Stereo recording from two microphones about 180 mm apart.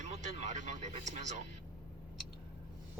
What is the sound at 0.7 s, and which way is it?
Speech, 40° right (ahead or behind).